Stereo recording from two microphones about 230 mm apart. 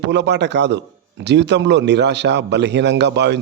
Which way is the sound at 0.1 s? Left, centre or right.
Right.